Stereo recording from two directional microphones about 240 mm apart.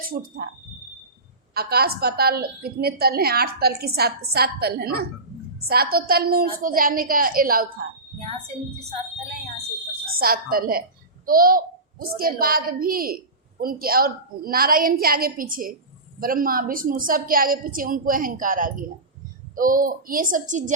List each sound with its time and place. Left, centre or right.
0.0 s speech: right
1.5 s a child's voice: right
10.2 s a child's voice: right